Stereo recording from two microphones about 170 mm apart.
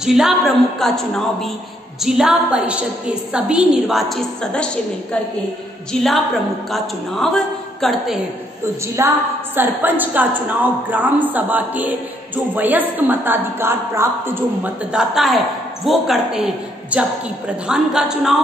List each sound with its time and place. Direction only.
0.0 s a woman's voice: 5° right (ahead or behind)
5.9 s a woman's voice: centre (ahead or behind)
9.0 s a woman's voice: 15° right (ahead or behind)